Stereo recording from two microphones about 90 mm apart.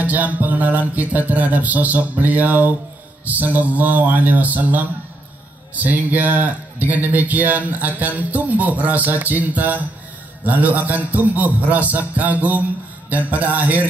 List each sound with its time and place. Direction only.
0.0 s speech: 20° right (ahead or behind)